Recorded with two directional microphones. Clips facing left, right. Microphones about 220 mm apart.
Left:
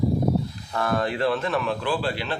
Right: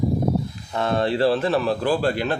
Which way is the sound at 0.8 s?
25° right (ahead or behind).